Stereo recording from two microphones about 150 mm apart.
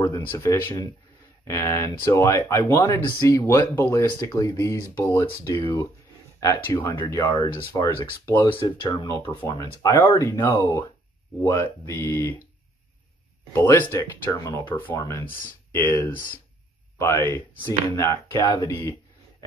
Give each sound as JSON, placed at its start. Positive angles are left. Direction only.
{"t": 0.0, "sound": "speech", "side_deg": 20}
{"t": 5.4, "sound": "speech", "side_deg": 30}
{"t": 9.5, "sound": "speech", "side_deg": 25}
{"t": 13.5, "sound": "speech", "side_deg": 15}
{"t": 15.2, "sound": "speech", "side_deg": 70}
{"t": 15.7, "sound": "speech", "side_deg": 15}
{"t": 16.1, "sound": "speech", "side_deg": 70}
{"t": 17.0, "sound": "speech", "side_deg": 15}